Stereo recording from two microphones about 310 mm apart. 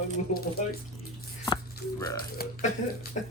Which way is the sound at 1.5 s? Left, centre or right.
Centre.